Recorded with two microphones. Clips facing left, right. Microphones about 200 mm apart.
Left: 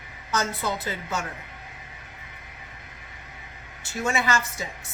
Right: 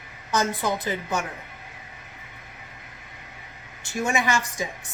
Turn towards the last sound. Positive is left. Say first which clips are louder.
# right 1 dB
turn(degrees=-15)  # may be behind; listen again after turning